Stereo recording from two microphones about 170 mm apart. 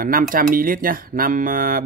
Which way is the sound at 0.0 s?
55° right (ahead or behind).